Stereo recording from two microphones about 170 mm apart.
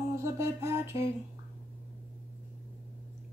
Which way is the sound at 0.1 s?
15° right (ahead or behind).